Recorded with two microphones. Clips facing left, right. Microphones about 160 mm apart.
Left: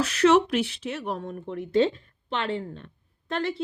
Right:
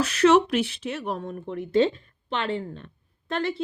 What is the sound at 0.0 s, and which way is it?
Speech, 55° right (ahead or behind).